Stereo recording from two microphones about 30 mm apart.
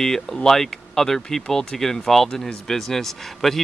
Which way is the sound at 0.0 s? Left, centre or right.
Centre.